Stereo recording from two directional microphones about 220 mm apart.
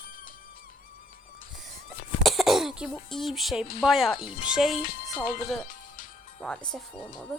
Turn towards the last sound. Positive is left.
turn(degrees=0)  # may be behind; listen again after turning